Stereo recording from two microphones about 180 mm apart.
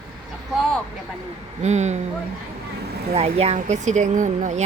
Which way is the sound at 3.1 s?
35° right (ahead or behind).